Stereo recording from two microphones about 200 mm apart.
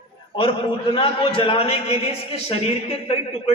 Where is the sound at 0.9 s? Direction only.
25° left (ahead or behind).